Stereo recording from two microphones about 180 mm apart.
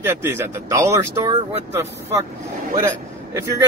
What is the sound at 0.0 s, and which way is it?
Speech, 15° right (ahead or behind).